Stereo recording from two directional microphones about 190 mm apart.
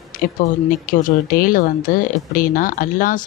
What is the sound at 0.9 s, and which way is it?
Speech, 50° left (ahead or behind).